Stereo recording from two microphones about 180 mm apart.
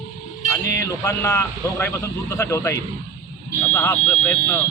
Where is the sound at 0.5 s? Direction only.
15° left (ahead or behind).